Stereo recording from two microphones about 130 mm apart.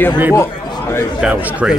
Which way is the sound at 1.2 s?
5° right (ahead or behind).